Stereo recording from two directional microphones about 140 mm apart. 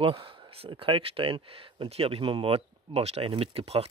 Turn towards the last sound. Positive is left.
turn(degrees=-45)  # may be behind; listen again after turning